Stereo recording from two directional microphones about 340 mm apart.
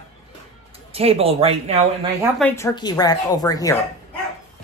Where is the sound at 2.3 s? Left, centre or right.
Centre.